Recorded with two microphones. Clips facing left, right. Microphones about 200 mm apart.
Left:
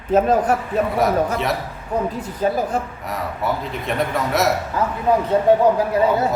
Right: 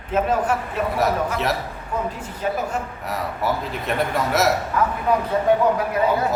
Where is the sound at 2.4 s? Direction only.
35° left (ahead or behind).